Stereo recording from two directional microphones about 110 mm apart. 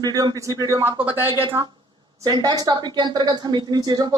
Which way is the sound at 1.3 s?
50° right (ahead or behind).